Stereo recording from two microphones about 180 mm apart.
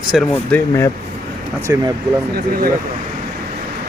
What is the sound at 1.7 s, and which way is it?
Speech, 15° right (ahead or behind).